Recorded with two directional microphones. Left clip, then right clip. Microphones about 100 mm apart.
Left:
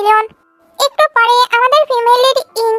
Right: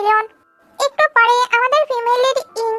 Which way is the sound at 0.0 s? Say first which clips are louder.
Left 4 dB; 45° left (ahead or behind).